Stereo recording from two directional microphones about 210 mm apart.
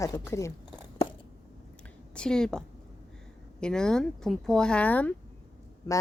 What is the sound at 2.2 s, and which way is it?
Speech, 5° left (ahead or behind).